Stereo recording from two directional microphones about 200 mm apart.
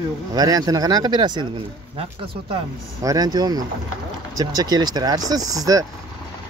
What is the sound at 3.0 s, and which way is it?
Speech, 15° right (ahead or behind).